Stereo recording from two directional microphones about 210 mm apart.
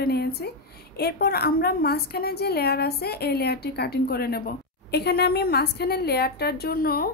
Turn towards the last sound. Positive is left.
turn(degrees=45)  # may be behind; listen again after turning